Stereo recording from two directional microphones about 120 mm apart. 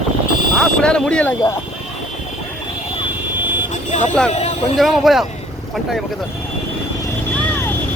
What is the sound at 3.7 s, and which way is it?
Vehicle, 90° left.